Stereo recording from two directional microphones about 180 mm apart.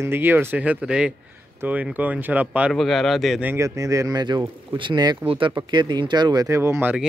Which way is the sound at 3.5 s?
15° right (ahead or behind).